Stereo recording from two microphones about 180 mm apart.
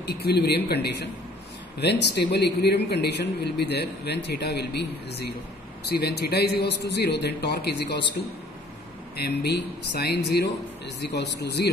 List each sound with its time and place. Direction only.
0.0 s a man's voice: 65° left (ahead or behind)
9.1 s a man's voice: 65° left (ahead or behind)